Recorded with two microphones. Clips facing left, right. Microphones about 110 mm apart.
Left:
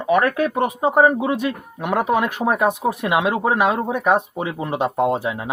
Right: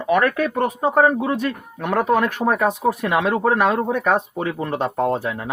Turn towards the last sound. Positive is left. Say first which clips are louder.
# left 1 dB
turn(degrees=15)  # may be behind; listen again after turning